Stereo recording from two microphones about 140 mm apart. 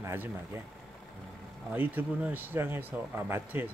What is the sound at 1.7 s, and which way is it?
Speech, 15° right (ahead or behind).